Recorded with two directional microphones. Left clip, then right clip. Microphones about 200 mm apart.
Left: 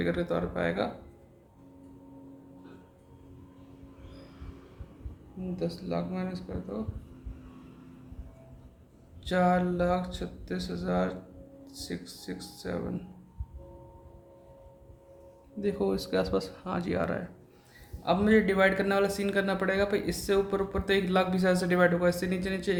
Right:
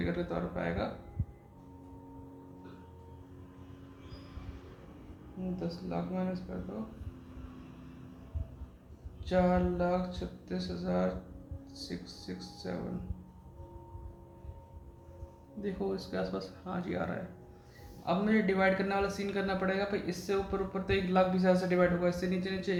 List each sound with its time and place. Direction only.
0.0 s a man's voice: 50° left (ahead or behind)
5.5 s a man's voice: 50° left (ahead or behind)
9.2 s a man's voice: 50° left (ahead or behind)
15.6 s a man's voice: 50° left (ahead or behind)